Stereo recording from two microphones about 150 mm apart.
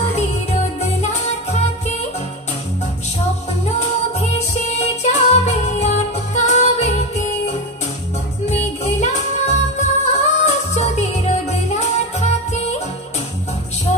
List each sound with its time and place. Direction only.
0.1 s music: 50° left (ahead or behind)
4.4 s music: 50° left (ahead or behind)
8.8 s music: 50° left (ahead or behind)